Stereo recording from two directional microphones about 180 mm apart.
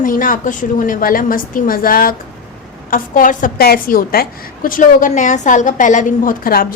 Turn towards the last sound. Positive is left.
turn(degrees=50)  # may be behind; listen again after turning